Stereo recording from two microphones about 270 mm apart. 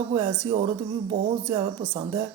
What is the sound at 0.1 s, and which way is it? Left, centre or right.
Speech, centre.